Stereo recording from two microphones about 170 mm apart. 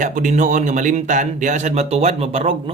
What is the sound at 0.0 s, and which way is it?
Speech, 45° right (ahead or behind).